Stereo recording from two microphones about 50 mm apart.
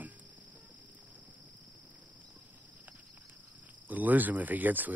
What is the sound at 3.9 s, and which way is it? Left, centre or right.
Speech, right.